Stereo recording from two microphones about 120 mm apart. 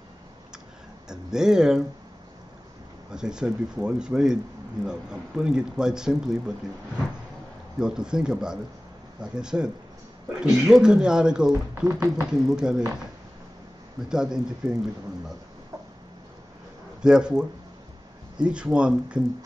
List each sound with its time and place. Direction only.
1.0 s speech: 5° right (ahead or behind)
3.1 s speech: 5° right (ahead or behind)
7.8 s speech: 5° right (ahead or behind)
11.9 s speech: 25° right (ahead or behind)
12.3 s speech: 5° right (ahead or behind)
14.0 s speech: 5° right (ahead or behind)
17.0 s speech: 5° right (ahead or behind)